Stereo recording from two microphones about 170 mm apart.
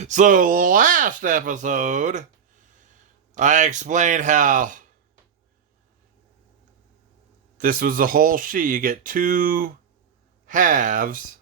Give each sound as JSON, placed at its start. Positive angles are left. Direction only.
{"t": 0.0, "sound": "speech", "side_deg": -45}
{"t": 3.3, "sound": "speech", "side_deg": -45}
{"t": 7.6, "sound": "speech", "side_deg": -55}